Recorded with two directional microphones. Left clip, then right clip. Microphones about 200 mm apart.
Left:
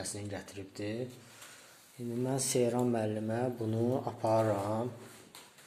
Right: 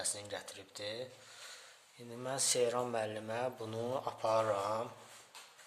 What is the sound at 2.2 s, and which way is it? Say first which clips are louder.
Speech: left 2 dB; 10° right (ahead or behind).